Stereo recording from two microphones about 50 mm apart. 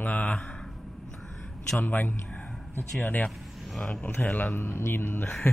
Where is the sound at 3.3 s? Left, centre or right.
Centre.